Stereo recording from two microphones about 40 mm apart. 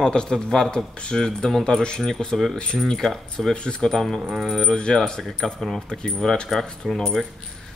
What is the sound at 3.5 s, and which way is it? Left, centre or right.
Speech, left.